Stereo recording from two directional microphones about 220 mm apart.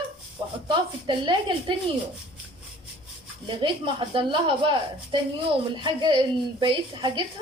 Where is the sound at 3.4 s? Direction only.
20° right (ahead or behind).